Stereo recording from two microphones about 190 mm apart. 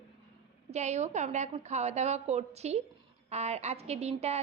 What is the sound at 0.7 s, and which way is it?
A woman's voice, 35° right (ahead or behind).